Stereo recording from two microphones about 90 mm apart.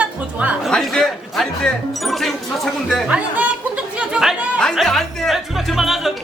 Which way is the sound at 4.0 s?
5° right (ahead or behind).